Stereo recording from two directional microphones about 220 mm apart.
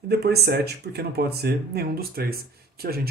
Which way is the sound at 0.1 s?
45° right (ahead or behind).